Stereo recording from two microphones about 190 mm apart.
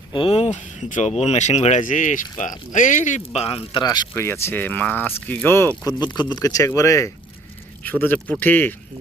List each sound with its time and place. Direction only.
0.1 s speech: 30° left (ahead or behind); by 6.0 s 10° left (ahead or behind)
6.0 s speech: 20° left (ahead or behind)